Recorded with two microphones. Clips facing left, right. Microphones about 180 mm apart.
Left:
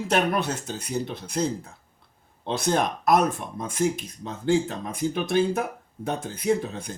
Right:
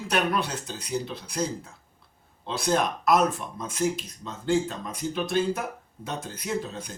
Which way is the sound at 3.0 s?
55° left (ahead or behind).